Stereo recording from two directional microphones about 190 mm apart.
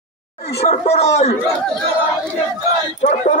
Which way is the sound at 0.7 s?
35° left (ahead or behind).